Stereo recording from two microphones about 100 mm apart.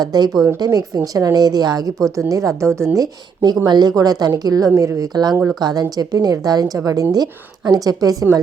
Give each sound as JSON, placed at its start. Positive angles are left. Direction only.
{"t": 0.0, "sound": "a woman's voice", "side_deg": -40}